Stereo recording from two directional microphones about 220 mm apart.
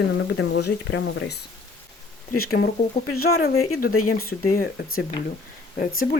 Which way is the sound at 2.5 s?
50° left (ahead or behind).